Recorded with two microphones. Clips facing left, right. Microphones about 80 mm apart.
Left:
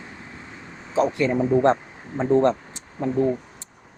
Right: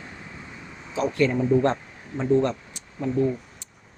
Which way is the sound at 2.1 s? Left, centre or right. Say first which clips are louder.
Left 3 dB; left.